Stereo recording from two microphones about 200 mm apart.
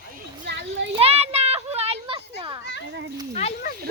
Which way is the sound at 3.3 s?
35° left (ahead or behind).